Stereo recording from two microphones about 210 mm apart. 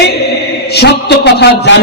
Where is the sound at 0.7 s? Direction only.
50° left (ahead or behind).